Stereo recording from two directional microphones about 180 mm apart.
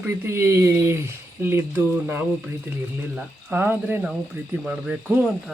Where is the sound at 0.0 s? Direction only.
15° right (ahead or behind).